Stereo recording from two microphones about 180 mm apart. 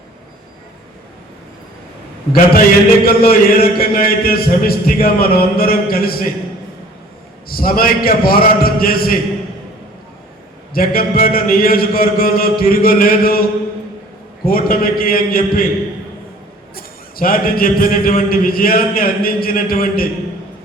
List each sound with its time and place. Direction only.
2.3 s a man's voice: 55° left (ahead or behind)
7.4 s a man's voice: 55° left (ahead or behind)
10.8 s a man's voice: 55° left (ahead or behind)
14.4 s a man's voice: 55° left (ahead or behind)
16.7 s a man's voice: 50° left (ahead or behind)